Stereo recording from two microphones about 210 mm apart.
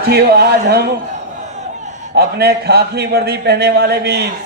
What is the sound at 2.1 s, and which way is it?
A man's voice, 50° right (ahead or behind).